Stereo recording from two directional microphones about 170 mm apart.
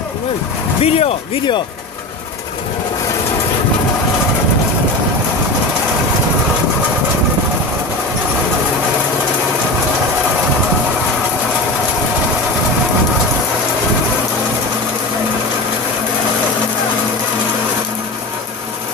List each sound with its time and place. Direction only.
0.8 s speech: 35° left (ahead or behind)